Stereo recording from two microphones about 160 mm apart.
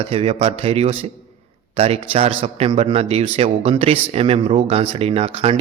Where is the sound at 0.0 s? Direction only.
40° right (ahead or behind).